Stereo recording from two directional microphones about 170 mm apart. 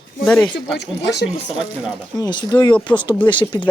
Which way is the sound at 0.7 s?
90° left.